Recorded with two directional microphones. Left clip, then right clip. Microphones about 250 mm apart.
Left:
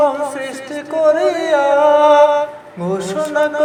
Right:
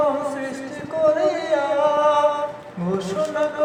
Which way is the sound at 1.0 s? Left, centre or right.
Left.